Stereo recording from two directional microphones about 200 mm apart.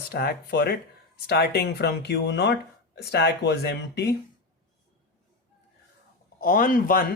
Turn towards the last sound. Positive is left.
turn(degrees=45)  # may be behind; listen again after turning